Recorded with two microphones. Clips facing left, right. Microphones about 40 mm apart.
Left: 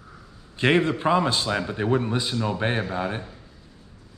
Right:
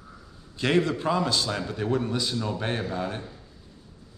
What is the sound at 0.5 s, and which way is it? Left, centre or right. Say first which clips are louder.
A man's voice: left 3 dB; left.